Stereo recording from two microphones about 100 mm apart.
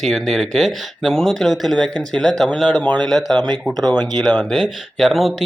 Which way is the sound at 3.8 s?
45° right (ahead or behind).